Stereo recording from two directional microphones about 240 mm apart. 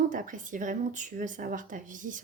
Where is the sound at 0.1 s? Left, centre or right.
Right.